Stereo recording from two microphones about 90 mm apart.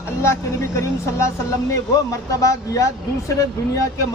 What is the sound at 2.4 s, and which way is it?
Speech, 35° left (ahead or behind).